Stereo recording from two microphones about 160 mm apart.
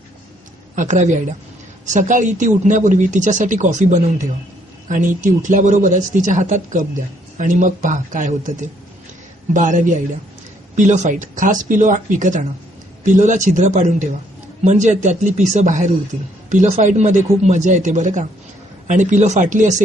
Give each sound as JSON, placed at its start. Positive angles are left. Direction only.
{"t": 0.8, "sound": "speech", "side_deg": -50}